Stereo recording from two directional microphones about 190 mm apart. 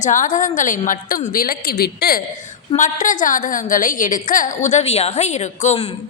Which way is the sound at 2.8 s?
45° left (ahead or behind).